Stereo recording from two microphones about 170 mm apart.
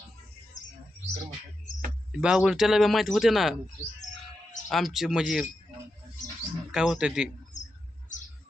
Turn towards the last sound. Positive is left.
turn(degrees=-5)  # may be behind; listen again after turning